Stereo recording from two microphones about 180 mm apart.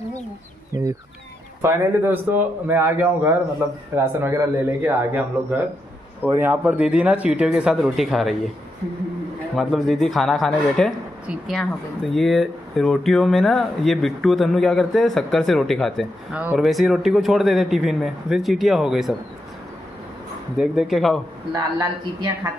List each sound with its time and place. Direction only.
1.6 s speech: 10° right (ahead or behind)
9.6 s speech: centre (ahead or behind)
20.5 s speech: 5° right (ahead or behind)
21.7 s speech: 20° right (ahead or behind)